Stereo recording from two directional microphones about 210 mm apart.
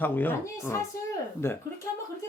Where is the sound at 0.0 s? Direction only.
10° left (ahead or behind).